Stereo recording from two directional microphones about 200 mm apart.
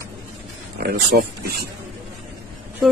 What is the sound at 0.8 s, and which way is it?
Speech, 50° right (ahead or behind).